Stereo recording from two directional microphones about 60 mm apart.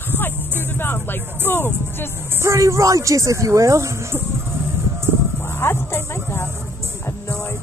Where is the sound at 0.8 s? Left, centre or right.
Left.